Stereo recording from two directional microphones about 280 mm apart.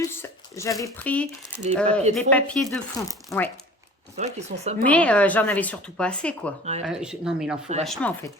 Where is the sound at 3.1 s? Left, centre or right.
Centre.